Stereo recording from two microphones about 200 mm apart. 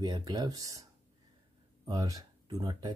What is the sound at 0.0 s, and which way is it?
Speech, 20° right (ahead or behind).